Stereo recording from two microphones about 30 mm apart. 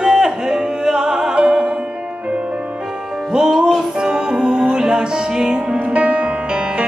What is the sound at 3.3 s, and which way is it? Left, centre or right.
Music, centre.